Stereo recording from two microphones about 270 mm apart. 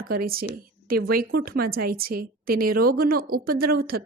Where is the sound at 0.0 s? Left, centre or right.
Right.